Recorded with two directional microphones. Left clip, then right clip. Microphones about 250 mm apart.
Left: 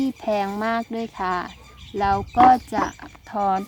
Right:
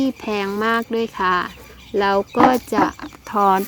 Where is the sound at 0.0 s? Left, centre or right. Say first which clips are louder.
Right 1 dB; centre.